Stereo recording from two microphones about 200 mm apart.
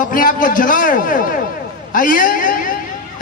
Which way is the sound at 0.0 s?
45° left (ahead or behind).